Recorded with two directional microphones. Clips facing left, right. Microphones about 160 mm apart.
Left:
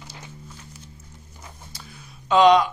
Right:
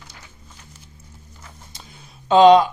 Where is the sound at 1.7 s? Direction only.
20° right (ahead or behind).